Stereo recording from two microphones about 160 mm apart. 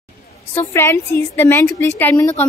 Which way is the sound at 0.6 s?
15° left (ahead or behind).